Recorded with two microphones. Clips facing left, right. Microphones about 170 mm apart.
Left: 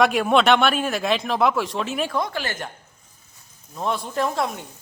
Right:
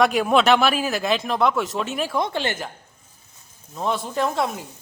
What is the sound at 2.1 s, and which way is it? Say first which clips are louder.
Speech: right 2 dB; 25° right (ahead or behind).